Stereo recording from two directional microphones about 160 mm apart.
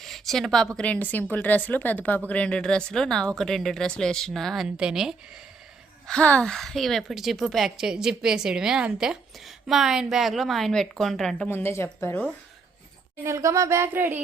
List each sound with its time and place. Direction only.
0.0 s a woman's voice: centre (ahead or behind)
6.1 s a woman's voice: 5° left (ahead or behind)
11.4 s speech: 15° left (ahead or behind)
13.2 s speech: 20° right (ahead or behind)